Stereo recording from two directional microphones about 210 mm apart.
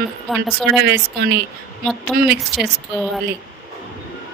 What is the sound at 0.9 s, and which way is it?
Speech, 50° right (ahead or behind).